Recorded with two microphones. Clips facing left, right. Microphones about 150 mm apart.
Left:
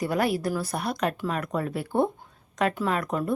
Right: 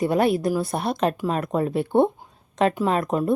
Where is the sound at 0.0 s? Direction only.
25° right (ahead or behind).